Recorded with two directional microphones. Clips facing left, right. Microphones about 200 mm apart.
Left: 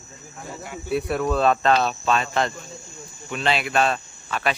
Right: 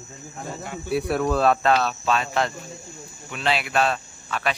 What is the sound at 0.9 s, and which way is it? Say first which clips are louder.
Speech: even; centre (ahead or behind).